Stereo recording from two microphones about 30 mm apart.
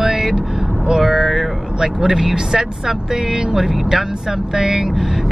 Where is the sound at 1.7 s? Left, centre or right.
Centre.